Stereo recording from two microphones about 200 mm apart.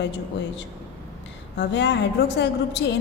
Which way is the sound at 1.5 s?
60° left (ahead or behind).